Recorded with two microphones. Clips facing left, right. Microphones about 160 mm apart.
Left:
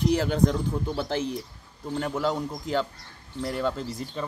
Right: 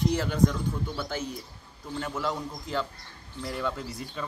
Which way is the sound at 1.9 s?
40° left (ahead or behind).